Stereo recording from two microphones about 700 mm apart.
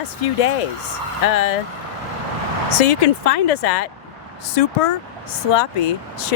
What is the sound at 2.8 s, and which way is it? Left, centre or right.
Speech, left.